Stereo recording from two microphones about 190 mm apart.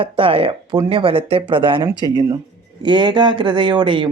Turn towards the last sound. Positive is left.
turn(degrees=-25)  # may be behind; listen again after turning